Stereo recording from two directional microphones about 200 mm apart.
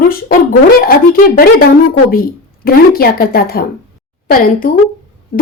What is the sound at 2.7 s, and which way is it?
Speech, 50° left (ahead or behind).